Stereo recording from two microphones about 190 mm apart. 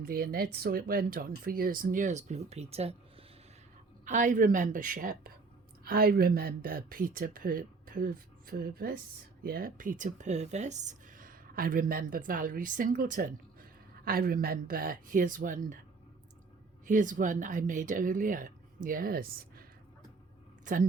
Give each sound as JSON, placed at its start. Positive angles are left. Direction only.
{"t": 0.0, "sound": "speech", "side_deg": -50}
{"t": 16.8, "sound": "speech", "side_deg": -45}